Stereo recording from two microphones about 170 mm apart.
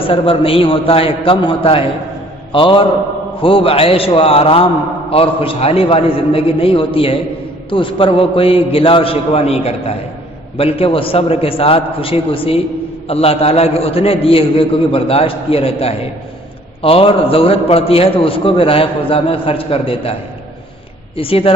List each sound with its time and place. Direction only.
0.0 s a man's voice: 30° left (ahead or behind)
21.2 s a man's voice: 35° left (ahead or behind)